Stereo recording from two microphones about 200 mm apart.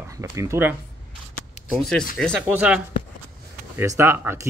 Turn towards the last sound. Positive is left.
turn(degrees=-10)  # may be behind; listen again after turning